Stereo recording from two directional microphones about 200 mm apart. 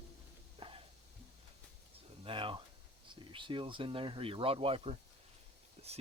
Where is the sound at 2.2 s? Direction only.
25° right (ahead or behind).